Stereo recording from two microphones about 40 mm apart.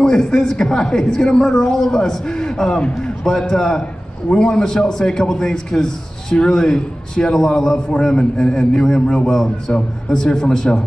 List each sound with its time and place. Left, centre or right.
0.0 s speech: centre